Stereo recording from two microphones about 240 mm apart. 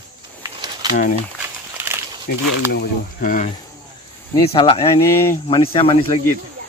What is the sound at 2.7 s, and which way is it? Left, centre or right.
Speech, left.